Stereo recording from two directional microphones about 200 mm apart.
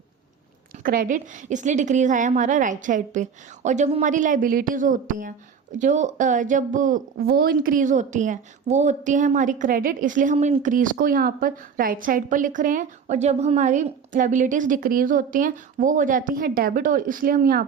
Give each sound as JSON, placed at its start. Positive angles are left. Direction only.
{"t": 0.8, "sound": "speech", "side_deg": -45}